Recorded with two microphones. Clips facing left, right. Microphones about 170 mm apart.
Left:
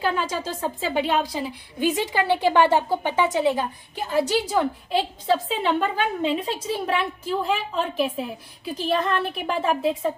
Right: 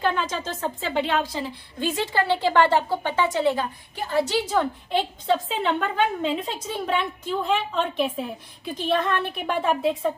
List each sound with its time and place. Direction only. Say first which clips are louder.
0.0 s a woman's voice: even; 5° left (ahead or behind)